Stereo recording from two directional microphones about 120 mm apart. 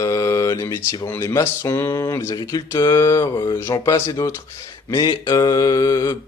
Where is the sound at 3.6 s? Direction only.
25° left (ahead or behind).